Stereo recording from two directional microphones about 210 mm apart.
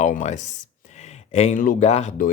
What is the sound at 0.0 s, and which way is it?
Speech, 35° left (ahead or behind).